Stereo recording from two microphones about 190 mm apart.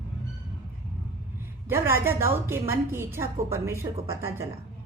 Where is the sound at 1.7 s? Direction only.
15° right (ahead or behind).